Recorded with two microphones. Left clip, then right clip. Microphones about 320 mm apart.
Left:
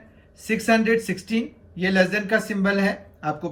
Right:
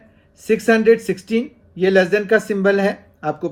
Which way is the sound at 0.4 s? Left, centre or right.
Centre.